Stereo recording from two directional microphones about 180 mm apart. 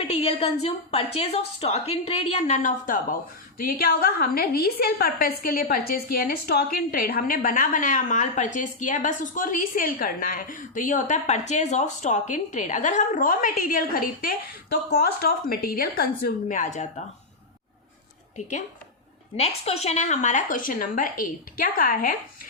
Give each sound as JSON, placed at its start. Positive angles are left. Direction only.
{"t": 0.1, "sound": "a woman's voice", "side_deg": 35}
{"t": 19.4, "sound": "a woman's voice", "side_deg": 35}